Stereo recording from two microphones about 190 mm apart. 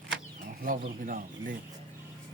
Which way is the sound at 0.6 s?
45° right (ahead or behind).